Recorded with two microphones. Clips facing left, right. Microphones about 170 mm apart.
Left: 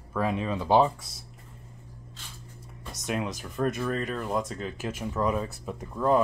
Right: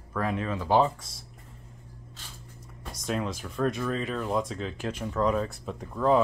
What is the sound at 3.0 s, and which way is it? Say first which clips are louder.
Speech: even; 10° left (ahead or behind).